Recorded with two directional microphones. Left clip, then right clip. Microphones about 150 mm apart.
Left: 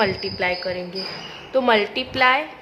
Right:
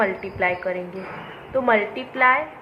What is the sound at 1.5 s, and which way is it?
Speech, 65° left (ahead or behind).